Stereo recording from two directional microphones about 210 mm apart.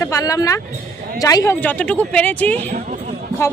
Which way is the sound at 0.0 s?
15° left (ahead or behind).